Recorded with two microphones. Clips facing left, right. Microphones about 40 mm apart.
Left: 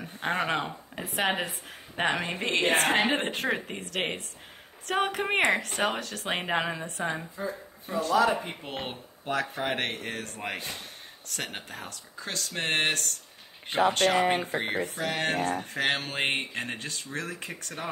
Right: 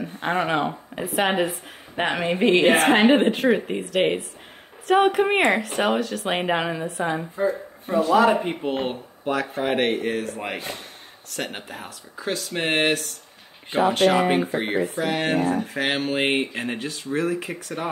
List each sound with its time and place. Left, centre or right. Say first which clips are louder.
0.0 s speech: right 5 dB; centre
3.1 s speech: right 10 dB; centre
7.3 s speech: right 11 dB; right
8.6 s speech: right 10 dB; centre